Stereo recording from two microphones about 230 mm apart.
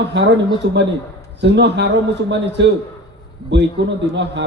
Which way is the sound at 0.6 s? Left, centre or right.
Right.